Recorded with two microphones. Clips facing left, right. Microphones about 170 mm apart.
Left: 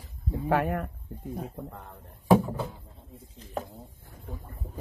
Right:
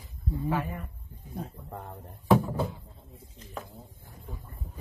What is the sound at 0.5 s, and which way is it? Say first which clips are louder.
Speech: left 6 dB; 65° left (ahead or behind).